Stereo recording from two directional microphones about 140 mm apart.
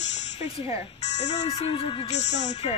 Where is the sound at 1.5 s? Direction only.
35° left (ahead or behind).